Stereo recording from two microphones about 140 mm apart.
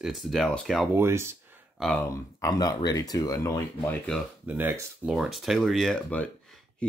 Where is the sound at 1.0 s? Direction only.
20° right (ahead or behind).